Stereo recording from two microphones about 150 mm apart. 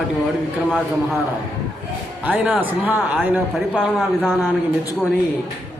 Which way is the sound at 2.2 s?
10° right (ahead or behind).